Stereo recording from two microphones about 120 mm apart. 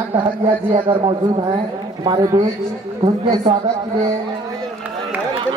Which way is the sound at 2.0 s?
30° right (ahead or behind).